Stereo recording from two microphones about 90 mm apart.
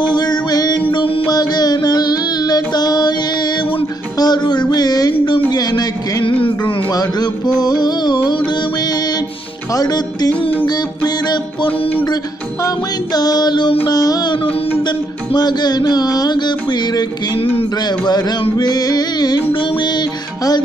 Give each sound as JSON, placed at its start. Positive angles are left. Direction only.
{"t": 0.0, "sound": "music", "side_deg": 50}
{"t": 4.2, "sound": "music", "side_deg": 50}
{"t": 9.8, "sound": "music", "side_deg": 45}
{"t": 12.6, "sound": "music", "side_deg": 45}